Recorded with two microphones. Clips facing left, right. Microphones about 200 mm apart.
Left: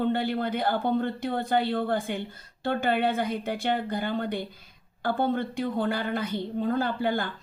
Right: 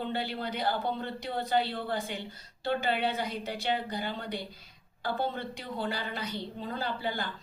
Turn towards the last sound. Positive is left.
turn(degrees=50)  # may be behind; listen again after turning